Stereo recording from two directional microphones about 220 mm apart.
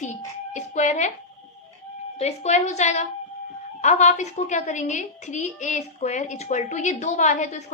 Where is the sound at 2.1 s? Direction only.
30° left (ahead or behind).